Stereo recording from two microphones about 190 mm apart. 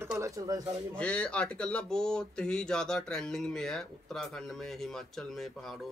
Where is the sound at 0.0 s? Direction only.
15° right (ahead or behind).